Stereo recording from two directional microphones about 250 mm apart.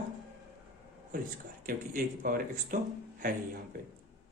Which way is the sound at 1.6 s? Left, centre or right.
Right.